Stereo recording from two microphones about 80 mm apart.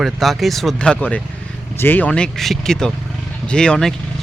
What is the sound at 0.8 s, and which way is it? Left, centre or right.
Speech, centre.